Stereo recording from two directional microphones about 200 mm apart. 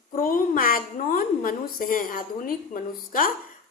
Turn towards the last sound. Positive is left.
turn(degrees=45)  # may be behind; listen again after turning